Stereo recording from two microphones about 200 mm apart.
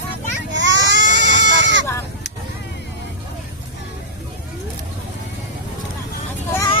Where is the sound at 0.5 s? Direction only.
65° right (ahead or behind).